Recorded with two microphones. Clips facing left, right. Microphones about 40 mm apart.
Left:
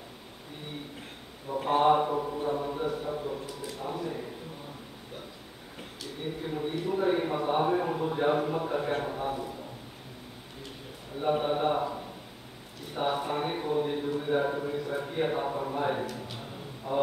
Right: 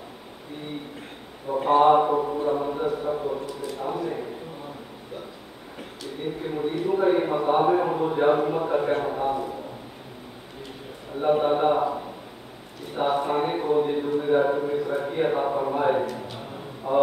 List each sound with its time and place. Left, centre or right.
1.7 s a man's voice: centre
2.1 s a man's voice: right
3.4 s a man's voice: centre
6.4 s a man's voice: centre
11.1 s a man's voice: centre
12.9 s a man's voice: centre
16.3 s a sound: centre
16.9 s a man's voice: centre